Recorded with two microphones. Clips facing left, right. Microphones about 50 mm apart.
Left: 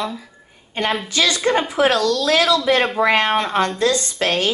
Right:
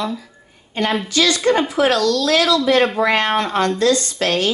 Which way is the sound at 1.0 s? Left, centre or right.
Left.